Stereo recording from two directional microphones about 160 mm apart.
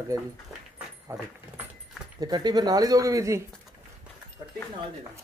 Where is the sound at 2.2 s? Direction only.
25° right (ahead or behind).